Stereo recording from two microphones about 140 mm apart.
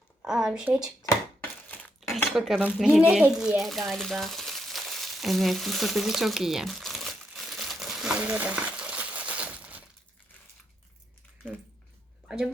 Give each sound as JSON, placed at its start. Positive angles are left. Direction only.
{"t": 0.2, "sound": "speech", "side_deg": -5}
{"t": 2.0, "sound": "cutlery", "side_deg": 0}
{"t": 2.7, "sound": "a sound", "side_deg": -5}